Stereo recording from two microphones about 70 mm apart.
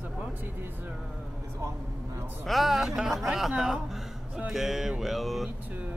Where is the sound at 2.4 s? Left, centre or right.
Centre.